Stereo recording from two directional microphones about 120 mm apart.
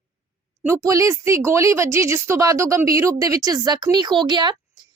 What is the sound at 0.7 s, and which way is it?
A woman's voice, 25° right (ahead or behind).